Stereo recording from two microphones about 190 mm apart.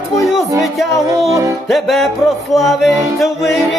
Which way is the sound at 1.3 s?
15° right (ahead or behind).